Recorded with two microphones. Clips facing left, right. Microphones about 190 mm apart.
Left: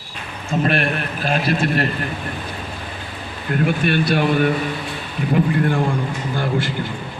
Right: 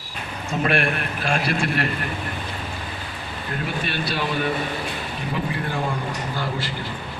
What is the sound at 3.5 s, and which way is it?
A man's voice, 55° left (ahead or behind).